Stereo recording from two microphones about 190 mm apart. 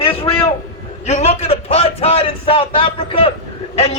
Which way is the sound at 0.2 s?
30° left (ahead or behind).